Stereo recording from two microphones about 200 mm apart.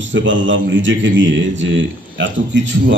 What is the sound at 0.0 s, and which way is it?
A man's voice, 65° right (ahead or behind).